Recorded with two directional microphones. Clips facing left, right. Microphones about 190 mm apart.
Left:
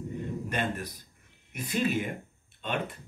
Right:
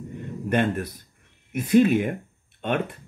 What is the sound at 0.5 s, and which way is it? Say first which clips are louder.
Speech: right 12 dB; 60° right (ahead or behind).